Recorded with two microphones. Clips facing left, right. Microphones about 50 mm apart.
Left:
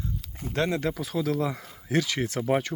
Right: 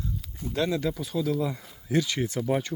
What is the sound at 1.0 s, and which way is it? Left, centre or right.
Speech, left.